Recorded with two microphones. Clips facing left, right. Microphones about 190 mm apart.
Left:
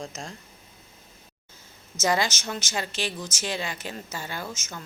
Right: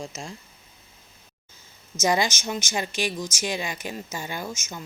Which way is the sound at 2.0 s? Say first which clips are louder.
Right 2 dB; 15° right (ahead or behind).